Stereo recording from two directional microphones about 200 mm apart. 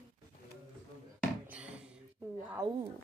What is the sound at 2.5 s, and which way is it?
Speech, 15° right (ahead or behind).